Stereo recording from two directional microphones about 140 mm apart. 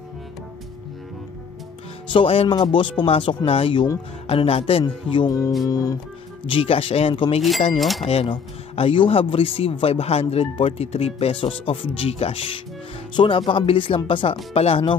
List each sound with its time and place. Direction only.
2.0 s speech: 40° left (ahead or behind); by 5.9 s 25° left (ahead or behind)
6.4 s speech: 40° left (ahead or behind)